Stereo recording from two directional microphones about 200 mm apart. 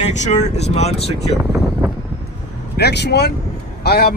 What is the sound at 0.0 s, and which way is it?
Speech, 35° left (ahead or behind).